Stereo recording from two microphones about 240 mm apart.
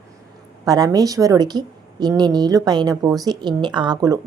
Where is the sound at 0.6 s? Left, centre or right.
Centre.